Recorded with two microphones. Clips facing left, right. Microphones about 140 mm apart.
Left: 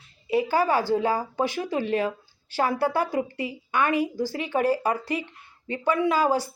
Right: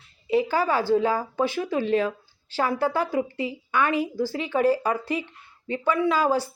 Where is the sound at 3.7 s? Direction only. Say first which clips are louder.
Even; 50° left (ahead or behind).